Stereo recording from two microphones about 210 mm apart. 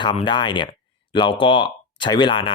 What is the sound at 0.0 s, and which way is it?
Speech, 20° left (ahead or behind).